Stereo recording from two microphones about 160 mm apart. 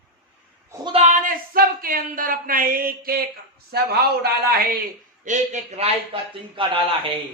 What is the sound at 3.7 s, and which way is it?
Speech, 80° right.